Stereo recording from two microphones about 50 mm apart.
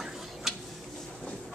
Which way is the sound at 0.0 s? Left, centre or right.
Centre.